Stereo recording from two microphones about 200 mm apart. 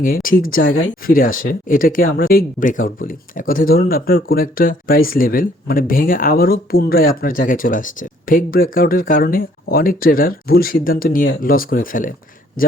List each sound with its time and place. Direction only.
0.0 s speech: 45° left (ahead or behind)